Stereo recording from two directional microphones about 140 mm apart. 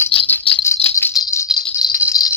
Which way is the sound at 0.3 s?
10° left (ahead or behind).